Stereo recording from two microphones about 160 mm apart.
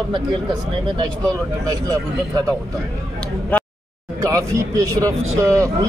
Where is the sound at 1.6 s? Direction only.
20° right (ahead or behind).